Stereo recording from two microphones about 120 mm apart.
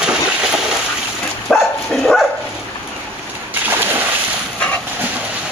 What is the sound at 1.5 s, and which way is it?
Dog, 5° left (ahead or behind).